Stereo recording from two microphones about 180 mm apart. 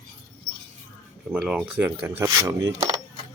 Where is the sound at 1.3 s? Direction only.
5° right (ahead or behind); by 3.0 s 20° right (ahead or behind).